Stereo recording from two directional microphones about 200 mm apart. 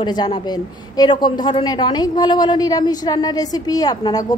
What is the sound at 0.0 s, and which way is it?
A woman's voice, 20° left (ahead or behind).